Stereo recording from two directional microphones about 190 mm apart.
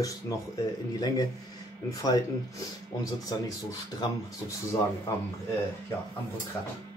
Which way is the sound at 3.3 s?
20° left (ahead or behind).